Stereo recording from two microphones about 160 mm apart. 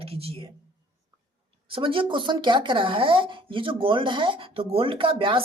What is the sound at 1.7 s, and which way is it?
Speech, 35° right (ahead or behind).